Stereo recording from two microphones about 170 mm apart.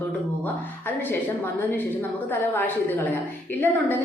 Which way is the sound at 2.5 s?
10° left (ahead or behind).